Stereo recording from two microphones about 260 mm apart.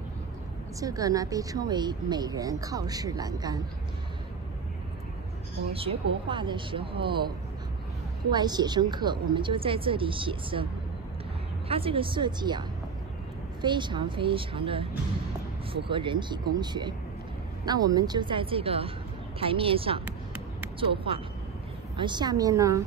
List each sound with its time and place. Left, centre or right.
0.7 s speech: centre
5.7 s a woman's voice: right
8.3 s a woman's voice: centre
20.1 s a sound: centre
21.9 s speech: centre